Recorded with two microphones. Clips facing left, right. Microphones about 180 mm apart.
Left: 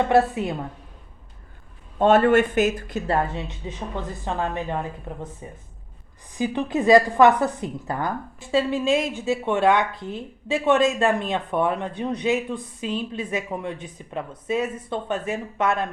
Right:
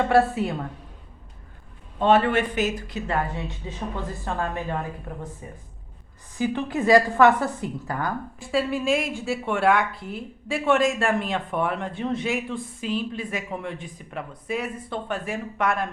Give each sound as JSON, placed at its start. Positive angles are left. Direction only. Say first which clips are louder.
{"t": 0.1, "sound": "a woman's voice", "louder": "left 1 dB", "side_deg": 20}
{"t": 2.0, "sound": "a man's voice", "louder": "left 3 dB", "side_deg": 45}
{"t": 3.6, "sound": "a woman's voice", "louder": "even", "side_deg": 20}
{"t": 6.3, "sound": "a woman's voice", "louder": "left 1 dB", "side_deg": 15}